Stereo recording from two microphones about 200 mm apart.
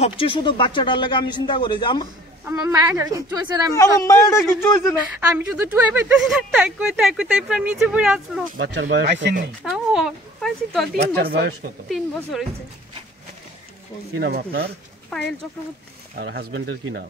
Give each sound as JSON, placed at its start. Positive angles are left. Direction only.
{"t": 0.0, "sound": "speech", "side_deg": 25}
{"t": 2.4, "sound": "a woman's voice", "side_deg": -10}
{"t": 3.7, "sound": "speech", "side_deg": 15}
{"t": 5.3, "sound": "speech", "side_deg": -10}
{"t": 8.5, "sound": "speech", "side_deg": -65}
{"t": 9.6, "sound": "speech", "side_deg": 0}
{"t": 11.1, "sound": "speech", "side_deg": -55}
{"t": 11.9, "sound": "speech", "side_deg": 0}
{"t": 14.1, "sound": "speech", "side_deg": -55}
{"t": 15.1, "sound": "speech", "side_deg": 0}
{"t": 16.2, "sound": "speech", "side_deg": -55}